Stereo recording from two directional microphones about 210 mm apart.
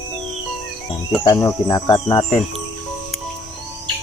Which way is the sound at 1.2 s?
15° left (ahead or behind).